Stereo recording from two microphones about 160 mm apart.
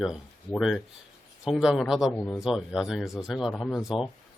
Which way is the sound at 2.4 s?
5° right (ahead or behind).